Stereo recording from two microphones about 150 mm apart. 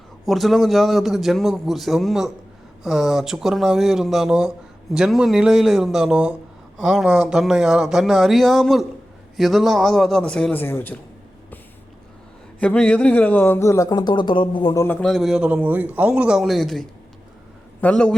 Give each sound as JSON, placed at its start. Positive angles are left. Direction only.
{"t": 0.3, "sound": "speech", "side_deg": 0}
{"t": 12.5, "sound": "a man's voice", "side_deg": 10}
{"t": 14.8, "sound": "a man's voice", "side_deg": 5}